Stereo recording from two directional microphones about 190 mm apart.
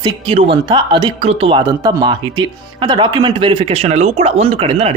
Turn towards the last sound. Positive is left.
turn(degrees=-30)  # may be behind; listen again after turning